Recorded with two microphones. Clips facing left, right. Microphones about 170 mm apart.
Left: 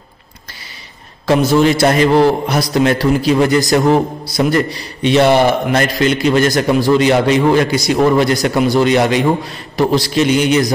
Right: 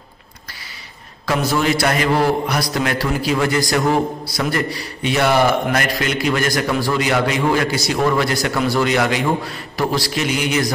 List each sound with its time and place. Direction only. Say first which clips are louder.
1.2 s a man's voice: left 7 dB; 25° left (ahead or behind)